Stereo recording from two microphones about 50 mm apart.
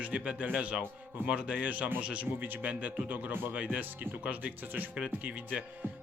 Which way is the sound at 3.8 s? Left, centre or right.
Right.